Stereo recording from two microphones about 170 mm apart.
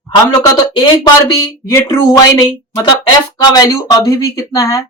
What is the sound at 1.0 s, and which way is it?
Speech, 25° left (ahead or behind).